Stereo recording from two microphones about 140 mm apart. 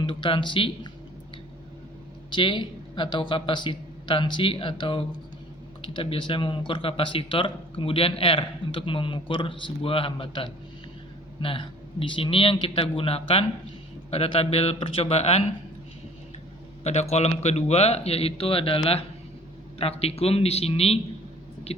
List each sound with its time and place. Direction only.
0.0 s speech: 35° left (ahead or behind)
2.3 s a man's voice: 35° left (ahead or behind)
16.8 s a man's voice: 50° left (ahead or behind)